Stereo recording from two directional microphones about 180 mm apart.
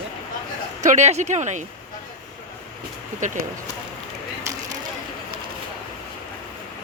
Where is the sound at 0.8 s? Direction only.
40° right (ahead or behind).